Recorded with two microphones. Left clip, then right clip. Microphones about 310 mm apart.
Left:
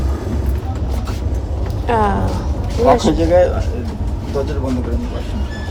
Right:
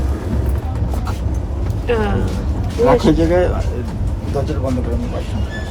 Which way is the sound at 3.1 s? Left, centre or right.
Centre.